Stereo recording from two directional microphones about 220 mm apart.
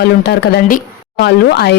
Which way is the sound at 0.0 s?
50° left (ahead or behind).